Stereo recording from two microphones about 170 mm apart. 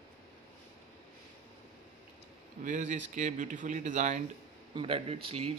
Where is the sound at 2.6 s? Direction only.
45° right (ahead or behind).